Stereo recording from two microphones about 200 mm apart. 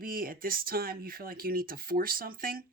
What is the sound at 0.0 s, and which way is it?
Speech, 45° right (ahead or behind).